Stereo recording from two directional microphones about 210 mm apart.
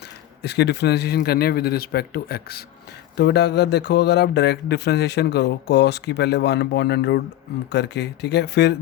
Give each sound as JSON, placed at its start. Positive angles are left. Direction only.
{"t": 0.4, "sound": "speech", "side_deg": 50}